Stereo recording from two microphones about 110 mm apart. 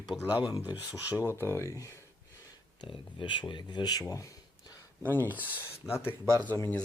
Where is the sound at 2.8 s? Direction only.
50° left (ahead or behind); by 4.3 s 30° left (ahead or behind).